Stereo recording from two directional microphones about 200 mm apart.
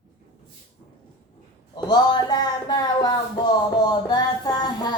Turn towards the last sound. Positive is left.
turn(degrees=20)  # may be behind; listen again after turning